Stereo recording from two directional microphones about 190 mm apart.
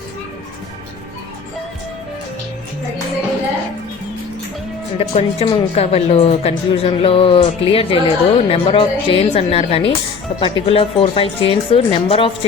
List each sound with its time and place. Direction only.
4.9 s speech: 35° left (ahead or behind)